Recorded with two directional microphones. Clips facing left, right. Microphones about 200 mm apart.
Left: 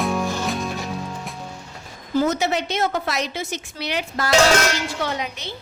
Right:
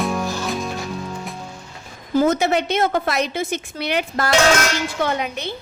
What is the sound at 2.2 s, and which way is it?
A woman's voice, 55° right (ahead or behind).